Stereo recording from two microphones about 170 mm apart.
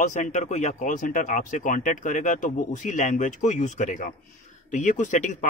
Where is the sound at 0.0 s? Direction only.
45° left (ahead or behind).